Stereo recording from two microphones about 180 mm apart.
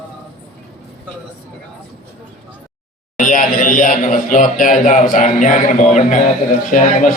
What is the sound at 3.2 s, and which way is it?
A man's voice, 45° left (ahead or behind).